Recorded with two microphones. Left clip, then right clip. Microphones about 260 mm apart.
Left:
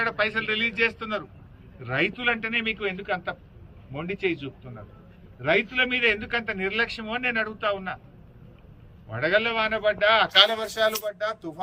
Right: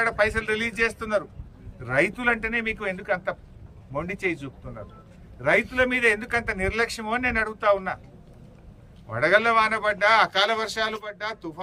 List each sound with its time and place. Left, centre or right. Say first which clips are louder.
0.0 s a man's voice: right 2 dB; centre
9.1 s a man's voice: right 4 dB; centre